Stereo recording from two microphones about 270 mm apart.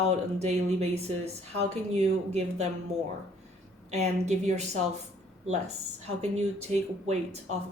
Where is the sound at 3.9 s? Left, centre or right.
Right.